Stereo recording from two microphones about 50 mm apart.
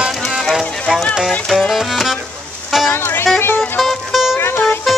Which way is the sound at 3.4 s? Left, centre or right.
Left.